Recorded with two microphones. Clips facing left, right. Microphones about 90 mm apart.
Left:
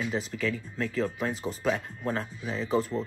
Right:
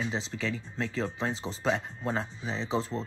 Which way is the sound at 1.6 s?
25° right (ahead or behind).